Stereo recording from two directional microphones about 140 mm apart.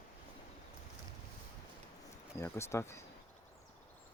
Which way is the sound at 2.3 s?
20° left (ahead or behind).